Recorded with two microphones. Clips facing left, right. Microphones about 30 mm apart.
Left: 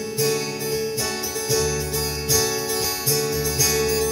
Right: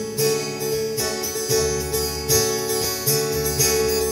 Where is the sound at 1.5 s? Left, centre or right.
Centre.